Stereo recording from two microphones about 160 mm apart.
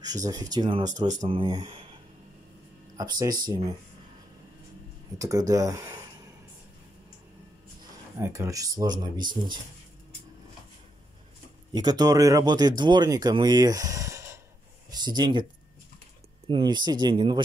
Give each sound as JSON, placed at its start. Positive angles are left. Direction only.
{"t": 0.0, "sound": "speech", "side_deg": -25}
{"t": 3.0, "sound": "speech", "side_deg": -25}
{"t": 5.2, "sound": "speech", "side_deg": -20}
{"t": 8.2, "sound": "speech", "side_deg": -20}
{"t": 11.7, "sound": "speech", "side_deg": -25}
{"t": 16.4, "sound": "speech", "side_deg": -30}